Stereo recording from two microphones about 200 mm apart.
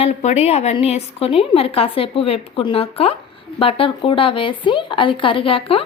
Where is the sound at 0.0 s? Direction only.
35° left (ahead or behind).